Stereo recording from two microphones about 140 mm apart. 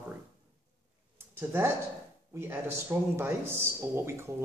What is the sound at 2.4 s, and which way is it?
A man's voice, 15° right (ahead or behind).